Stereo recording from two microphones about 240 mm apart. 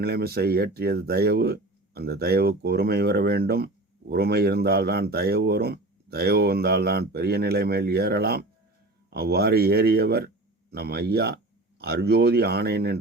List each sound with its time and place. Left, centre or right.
0.0 s speech: right